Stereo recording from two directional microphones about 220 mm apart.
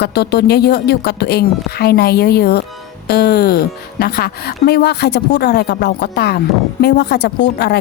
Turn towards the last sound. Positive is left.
turn(degrees=45)  # may be behind; listen again after turning